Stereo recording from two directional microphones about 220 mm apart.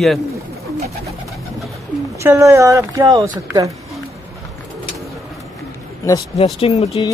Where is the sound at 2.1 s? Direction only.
15° right (ahead or behind).